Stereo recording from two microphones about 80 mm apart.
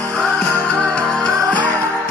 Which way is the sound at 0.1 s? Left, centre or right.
Centre.